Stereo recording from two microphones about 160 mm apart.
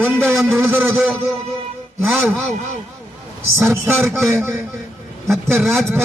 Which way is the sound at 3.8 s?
15° right (ahead or behind).